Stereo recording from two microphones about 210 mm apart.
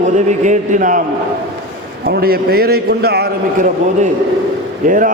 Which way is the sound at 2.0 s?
45° right (ahead or behind).